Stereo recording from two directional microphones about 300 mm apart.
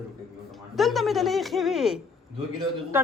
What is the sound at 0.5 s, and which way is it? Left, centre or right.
Speech, centre.